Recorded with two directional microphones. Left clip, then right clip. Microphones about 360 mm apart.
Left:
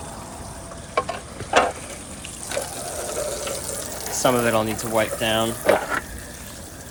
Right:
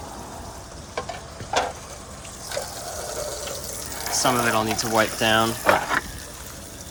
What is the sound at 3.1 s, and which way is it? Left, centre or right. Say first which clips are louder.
Water tap: left 5 dB; left.